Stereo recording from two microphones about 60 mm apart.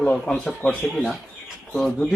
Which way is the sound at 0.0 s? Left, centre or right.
Left.